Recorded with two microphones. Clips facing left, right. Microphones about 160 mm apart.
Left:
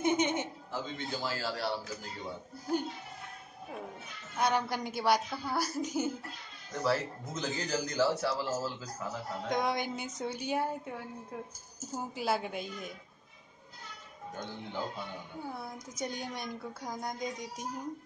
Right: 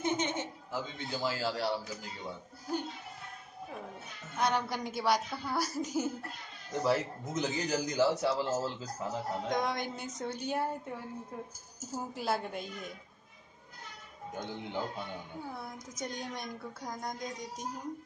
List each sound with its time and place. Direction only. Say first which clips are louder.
0.0 s chuckle: left 3 dB; 15° left (ahead or behind)
0.7 s a man's voice: left 1 dB; 15° right (ahead or behind)
4.4 s a woman's voice: left 1 dB; centre (ahead or behind)
6.7 s a man's voice: right 1 dB; 20° right (ahead or behind)
9.5 s a woman's voice: left 3 dB; 5° left (ahead or behind)
16.1 s a woman's voice: left 1 dB; 5° left (ahead or behind)